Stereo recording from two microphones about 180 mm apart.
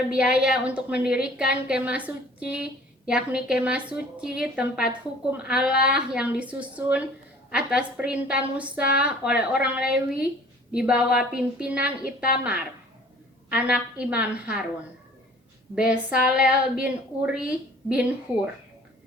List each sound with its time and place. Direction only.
0.1 s a woman's voice: 5° right (ahead or behind)
15.7 s a woman's voice: 5° right (ahead or behind)